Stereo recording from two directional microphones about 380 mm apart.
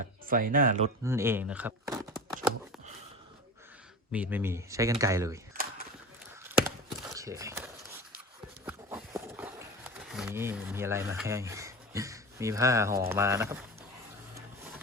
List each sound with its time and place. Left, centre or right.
0.3 s speech: right
1.0 s speech: centre
4.1 s speech: centre
6.4 s a sound: centre
10.1 s speech: centre